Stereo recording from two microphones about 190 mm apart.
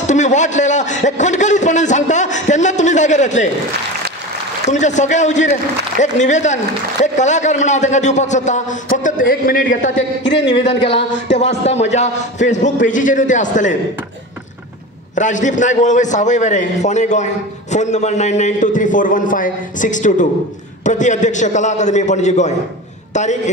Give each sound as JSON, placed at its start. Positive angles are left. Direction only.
{"t": 0.0, "sound": "a man's voice", "side_deg": 40}
{"t": 4.6, "sound": "a man's voice", "side_deg": 40}
{"t": 9.9, "sound": "a man's voice", "side_deg": 65}
{"t": 11.3, "sound": "a man's voice", "side_deg": 35}
{"t": 15.1, "sound": "a man's voice", "side_deg": 40}